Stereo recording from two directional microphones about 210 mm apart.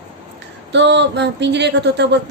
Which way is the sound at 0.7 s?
55° right (ahead or behind).